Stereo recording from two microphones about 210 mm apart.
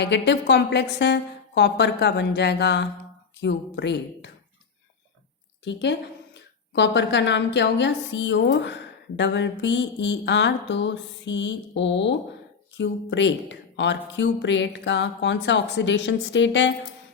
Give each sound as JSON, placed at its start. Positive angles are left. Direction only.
{"t": 0.0, "sound": "speech", "side_deg": 55}
{"t": 5.6, "sound": "speech", "side_deg": 55}